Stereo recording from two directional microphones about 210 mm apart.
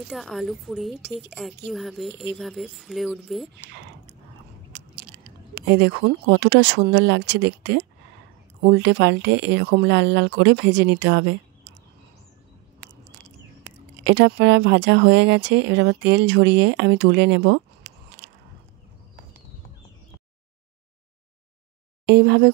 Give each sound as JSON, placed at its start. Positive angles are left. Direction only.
{"t": 0.1, "sound": "a woman's voice", "side_deg": 0}
{"t": 4.7, "sound": "speech", "side_deg": -55}
{"t": 14.0, "sound": "speech", "side_deg": -55}
{"t": 22.0, "sound": "speech", "side_deg": -55}